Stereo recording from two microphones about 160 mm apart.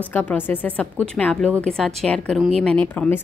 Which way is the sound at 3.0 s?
15° left (ahead or behind).